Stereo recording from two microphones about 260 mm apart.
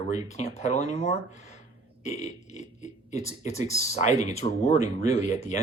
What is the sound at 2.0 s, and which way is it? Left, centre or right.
Burping, left.